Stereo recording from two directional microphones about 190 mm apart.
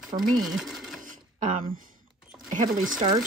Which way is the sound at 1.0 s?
45° right (ahead or behind).